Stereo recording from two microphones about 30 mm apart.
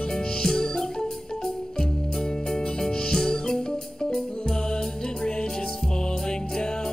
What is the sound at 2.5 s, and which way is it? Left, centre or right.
Music, left.